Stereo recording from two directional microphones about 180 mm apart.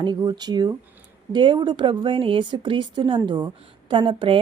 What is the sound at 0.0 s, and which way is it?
Speech, 25° right (ahead or behind).